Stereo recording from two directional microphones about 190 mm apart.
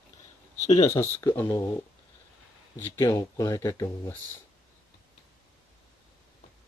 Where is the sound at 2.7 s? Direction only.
10° left (ahead or behind).